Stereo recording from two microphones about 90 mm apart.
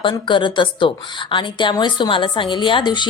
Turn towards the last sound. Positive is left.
turn(degrees=60)  # may be behind; listen again after turning